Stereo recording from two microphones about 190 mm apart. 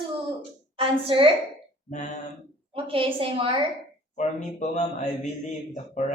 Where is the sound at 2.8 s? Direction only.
30° right (ahead or behind).